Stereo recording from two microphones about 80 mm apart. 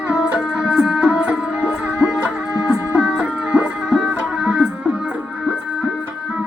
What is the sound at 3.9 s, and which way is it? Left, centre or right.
Music, centre.